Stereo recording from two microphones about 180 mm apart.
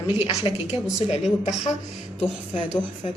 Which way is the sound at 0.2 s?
30° left (ahead or behind).